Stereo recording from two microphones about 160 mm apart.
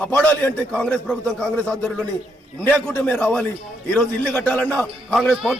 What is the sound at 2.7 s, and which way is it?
A man's voice, 5° left (ahead or behind).